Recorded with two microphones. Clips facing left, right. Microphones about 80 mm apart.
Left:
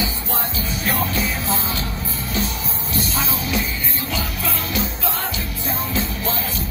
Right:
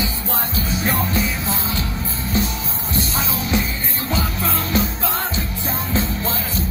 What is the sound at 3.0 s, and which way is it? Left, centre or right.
Music, right.